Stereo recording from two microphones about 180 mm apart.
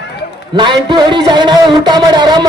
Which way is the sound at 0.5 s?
25° right (ahead or behind).